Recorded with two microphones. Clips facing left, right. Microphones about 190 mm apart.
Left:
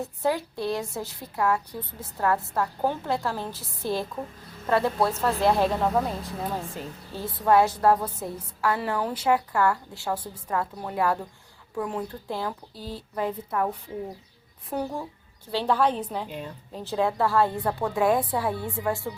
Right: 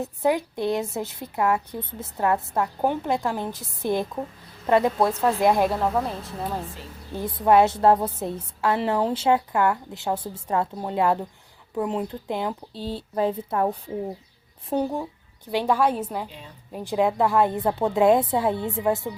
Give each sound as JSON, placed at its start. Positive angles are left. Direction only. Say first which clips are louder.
{"t": 0.0, "sound": "a woman's voice", "louder": "right 3 dB", "side_deg": -15}
{"t": 5.8, "sound": "a woman's voice", "louder": "even", "side_deg": 0}
{"t": 7.1, "sound": "a woman's voice", "louder": "right 3 dB", "side_deg": -15}
{"t": 15.5, "sound": "a woman's voice", "louder": "right 2 dB", "side_deg": -10}